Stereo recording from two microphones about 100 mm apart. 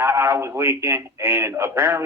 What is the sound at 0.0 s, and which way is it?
Speech, 25° right (ahead or behind).